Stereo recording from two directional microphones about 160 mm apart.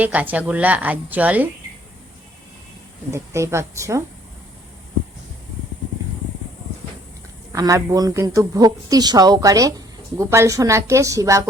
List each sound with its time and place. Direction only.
0.0 s a woman's voice: 10° right (ahead or behind)
3.1 s a woman's voice: 15° right (ahead or behind)
7.5 s speech: 20° right (ahead or behind)